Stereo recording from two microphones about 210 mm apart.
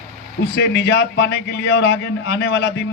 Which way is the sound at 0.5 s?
55° left (ahead or behind).